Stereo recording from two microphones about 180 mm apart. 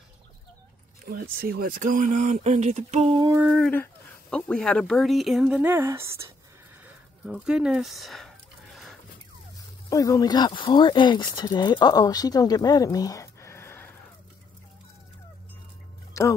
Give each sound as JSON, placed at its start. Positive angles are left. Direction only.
{"t": 1.0, "sound": "speech", "side_deg": -55}
{"t": 3.4, "sound": "speech", "side_deg": 0}
{"t": 7.4, "sound": "speech", "side_deg": -5}
{"t": 9.8, "sound": "speech", "side_deg": 20}
{"t": 16.1, "sound": "music", "side_deg": 15}